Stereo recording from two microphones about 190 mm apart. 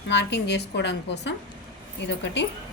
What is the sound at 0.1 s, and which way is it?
A woman's voice, 65° left (ahead or behind).